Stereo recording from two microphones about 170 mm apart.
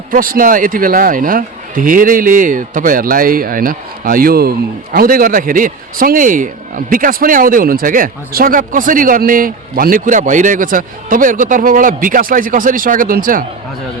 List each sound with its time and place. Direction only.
0.1 s speech: 55° right (ahead or behind)